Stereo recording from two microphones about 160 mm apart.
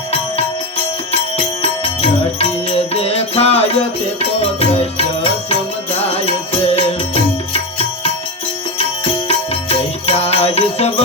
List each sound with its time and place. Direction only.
1.6 s music: 40° left (ahead or behind)
4.6 s music: 40° left (ahead or behind)
9.2 s music: 40° left (ahead or behind)